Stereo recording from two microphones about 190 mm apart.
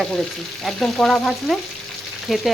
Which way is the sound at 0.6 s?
Centre (ahead or behind).